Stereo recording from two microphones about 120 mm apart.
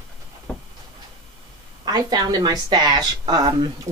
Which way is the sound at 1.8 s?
35° right (ahead or behind).